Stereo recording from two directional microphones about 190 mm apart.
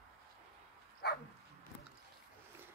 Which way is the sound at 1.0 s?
60° left (ahead or behind).